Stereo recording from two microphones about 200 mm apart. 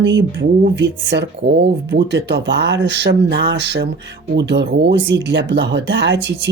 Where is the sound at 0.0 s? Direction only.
60° right (ahead or behind).